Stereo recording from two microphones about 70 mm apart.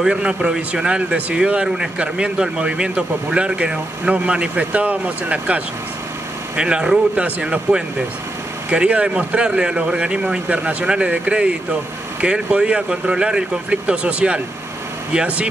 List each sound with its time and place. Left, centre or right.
0.0 s speech: centre